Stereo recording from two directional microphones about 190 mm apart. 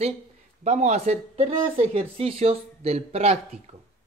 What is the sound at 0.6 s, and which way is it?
Speech, 35° right (ahead or behind).